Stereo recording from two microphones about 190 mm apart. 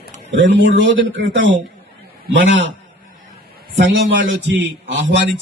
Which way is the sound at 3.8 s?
75° right (ahead or behind).